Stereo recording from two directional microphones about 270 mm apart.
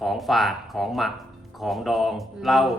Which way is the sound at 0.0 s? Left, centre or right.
Centre.